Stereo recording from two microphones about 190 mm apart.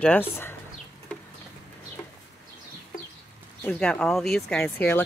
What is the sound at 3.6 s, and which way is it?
Speech, 5° left (ahead or behind).